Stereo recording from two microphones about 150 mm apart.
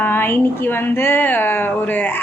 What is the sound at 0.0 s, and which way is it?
A woman's voice, 15° left (ahead or behind).